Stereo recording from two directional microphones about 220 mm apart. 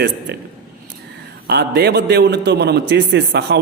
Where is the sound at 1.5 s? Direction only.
45° right (ahead or behind).